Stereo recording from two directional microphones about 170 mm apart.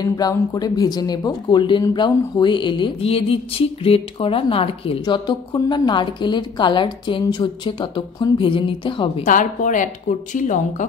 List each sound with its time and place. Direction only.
0.0 s speech: 20° left (ahead or behind)
9.2 s speech: 50° left (ahead or behind)